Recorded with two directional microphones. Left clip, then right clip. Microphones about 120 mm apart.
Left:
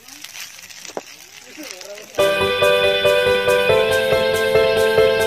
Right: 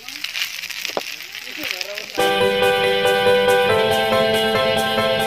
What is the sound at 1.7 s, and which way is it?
Music, centre (ahead or behind).